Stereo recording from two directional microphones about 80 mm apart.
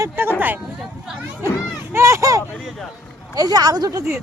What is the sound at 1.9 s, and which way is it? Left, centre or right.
Speech, right.